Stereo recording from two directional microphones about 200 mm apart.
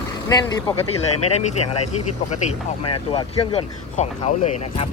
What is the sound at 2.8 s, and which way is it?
Speech, 25° left (ahead or behind).